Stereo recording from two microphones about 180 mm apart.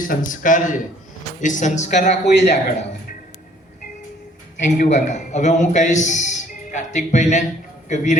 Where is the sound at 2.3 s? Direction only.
65° left (ahead or behind).